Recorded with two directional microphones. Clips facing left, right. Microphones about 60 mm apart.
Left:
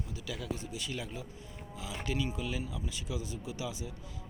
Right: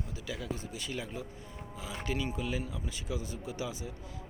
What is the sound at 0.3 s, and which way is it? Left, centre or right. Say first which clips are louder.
Speech: even; right.